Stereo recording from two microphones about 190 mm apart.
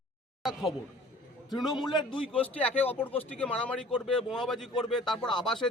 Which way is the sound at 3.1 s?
5° left (ahead or behind).